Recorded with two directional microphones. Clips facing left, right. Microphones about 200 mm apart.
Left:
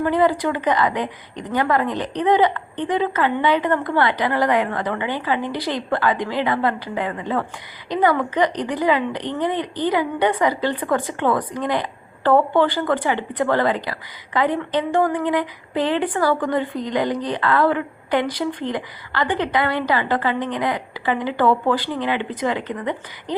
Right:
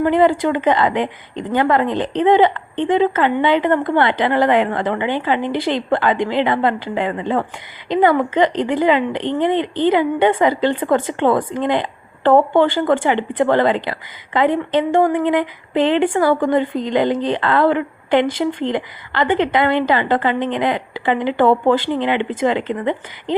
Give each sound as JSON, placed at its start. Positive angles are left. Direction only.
{"t": 0.0, "sound": "a woman's voice", "side_deg": -25}